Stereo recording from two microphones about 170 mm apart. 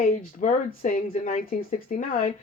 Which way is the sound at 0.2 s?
55° left (ahead or behind).